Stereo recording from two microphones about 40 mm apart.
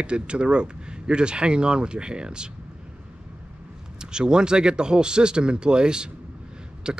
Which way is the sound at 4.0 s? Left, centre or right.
Centre.